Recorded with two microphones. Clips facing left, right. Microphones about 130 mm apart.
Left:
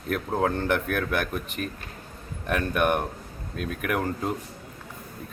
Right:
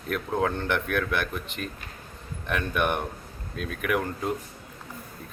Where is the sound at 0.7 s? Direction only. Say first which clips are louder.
Left 1 dB; 40° left (ahead or behind).